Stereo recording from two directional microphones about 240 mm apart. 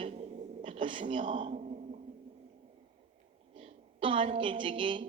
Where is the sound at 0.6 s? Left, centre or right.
Right.